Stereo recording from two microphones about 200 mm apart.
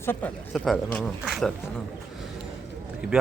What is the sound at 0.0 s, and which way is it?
Speech, 10° left (ahead or behind).